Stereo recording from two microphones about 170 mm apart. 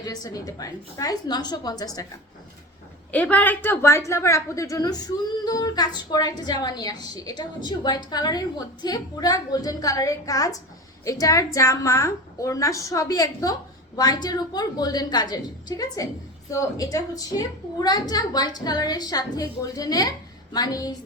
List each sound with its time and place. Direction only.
0.0 s a woman's voice: 20° left (ahead or behind)
3.1 s a woman's voice: 5° left (ahead or behind)